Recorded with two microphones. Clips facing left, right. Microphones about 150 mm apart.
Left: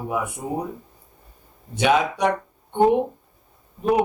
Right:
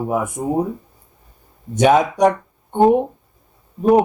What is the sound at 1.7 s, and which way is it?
Speech, 45° right (ahead or behind).